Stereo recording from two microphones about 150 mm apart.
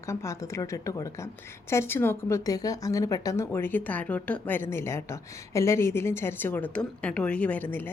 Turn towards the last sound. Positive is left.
turn(degrees=10)  # may be behind; listen again after turning